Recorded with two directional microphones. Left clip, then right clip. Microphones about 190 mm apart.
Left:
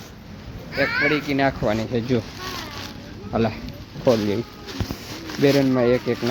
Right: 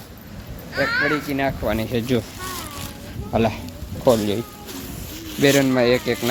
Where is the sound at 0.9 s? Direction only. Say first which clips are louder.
Right 1 dB; 35° left (ahead or behind).